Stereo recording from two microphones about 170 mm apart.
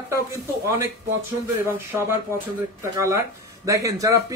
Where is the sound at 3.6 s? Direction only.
20° right (ahead or behind).